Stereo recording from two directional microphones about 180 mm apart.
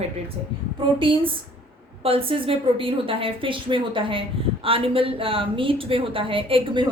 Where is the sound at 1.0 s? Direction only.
30° right (ahead or behind).